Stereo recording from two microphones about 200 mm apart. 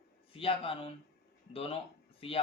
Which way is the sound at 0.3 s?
25° left (ahead or behind).